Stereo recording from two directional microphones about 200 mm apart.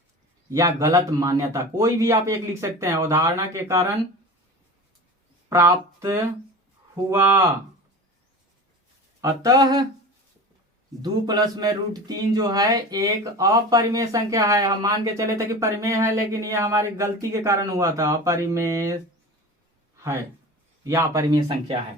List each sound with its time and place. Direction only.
0.5 s a man's voice: 15° right (ahead or behind)
5.5 s a man's voice: 15° right (ahead or behind)
9.2 s speech: 20° right (ahead or behind)
11.0 s a man's voice: 20° right (ahead or behind)
20.8 s a man's voice: 15° right (ahead or behind)